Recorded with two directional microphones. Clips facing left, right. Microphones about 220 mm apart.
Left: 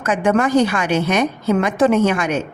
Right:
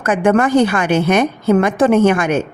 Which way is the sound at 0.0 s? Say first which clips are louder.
Right 3 dB; 55° right (ahead or behind).